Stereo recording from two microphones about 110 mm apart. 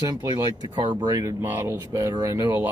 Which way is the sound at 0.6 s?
35° right (ahead or behind).